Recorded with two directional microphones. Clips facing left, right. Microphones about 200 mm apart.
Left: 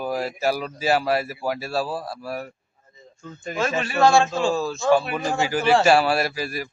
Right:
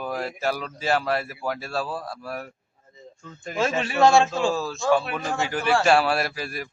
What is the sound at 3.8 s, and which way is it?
Speech, 25° right (ahead or behind).